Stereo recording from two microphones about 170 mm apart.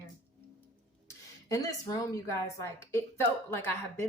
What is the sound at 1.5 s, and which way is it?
A woman's voice, 20° left (ahead or behind).